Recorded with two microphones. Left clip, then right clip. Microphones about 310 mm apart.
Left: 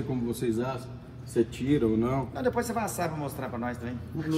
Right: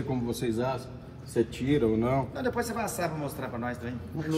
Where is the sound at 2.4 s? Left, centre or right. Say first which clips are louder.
Left 2 dB; centre.